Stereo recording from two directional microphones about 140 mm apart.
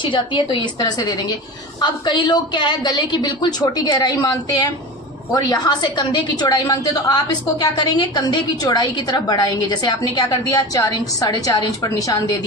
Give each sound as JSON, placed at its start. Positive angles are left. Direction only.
{"t": 0.0, "sound": "a woman's voice", "side_deg": 35}